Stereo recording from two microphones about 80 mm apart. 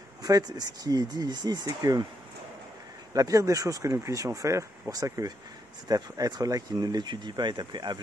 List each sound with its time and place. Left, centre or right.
0.2 s speech: right
3.1 s speech: right